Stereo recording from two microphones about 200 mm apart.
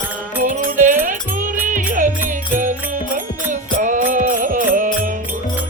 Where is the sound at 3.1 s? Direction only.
40° right (ahead or behind).